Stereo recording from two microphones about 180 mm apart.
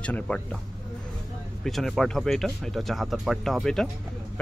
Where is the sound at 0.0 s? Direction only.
5° left (ahead or behind).